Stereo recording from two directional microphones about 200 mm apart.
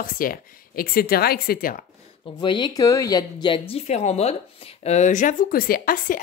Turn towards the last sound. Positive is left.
turn(degrees=45)  # may be behind; listen again after turning